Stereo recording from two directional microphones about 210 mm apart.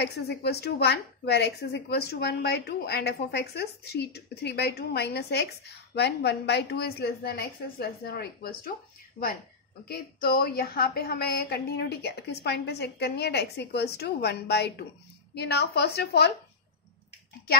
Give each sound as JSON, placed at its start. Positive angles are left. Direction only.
{"t": 0.0, "sound": "a woman's voice", "side_deg": 55}
{"t": 9.8, "sound": "a woman's voice", "side_deg": 45}